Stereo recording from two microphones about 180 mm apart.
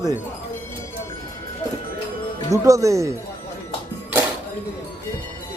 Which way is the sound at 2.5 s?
20° right (ahead or behind).